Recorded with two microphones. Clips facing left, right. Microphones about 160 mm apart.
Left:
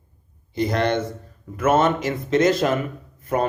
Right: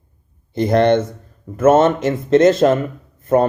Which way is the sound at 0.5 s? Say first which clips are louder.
Right 7 dB; 55° right (ahead or behind).